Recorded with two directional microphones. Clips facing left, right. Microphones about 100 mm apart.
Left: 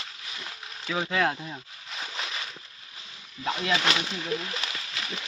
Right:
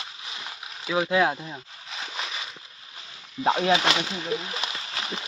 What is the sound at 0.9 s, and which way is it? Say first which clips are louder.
Speech: right 4 dB; 10° right (ahead or behind).